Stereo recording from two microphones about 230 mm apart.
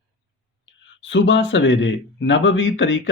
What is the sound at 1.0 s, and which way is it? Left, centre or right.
Speech, left.